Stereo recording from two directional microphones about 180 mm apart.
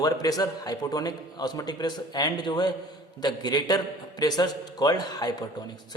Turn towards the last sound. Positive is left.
turn(degrees=20)  # may be behind; listen again after turning